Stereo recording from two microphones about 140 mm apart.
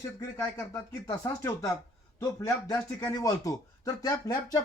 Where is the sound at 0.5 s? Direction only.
20° left (ahead or behind).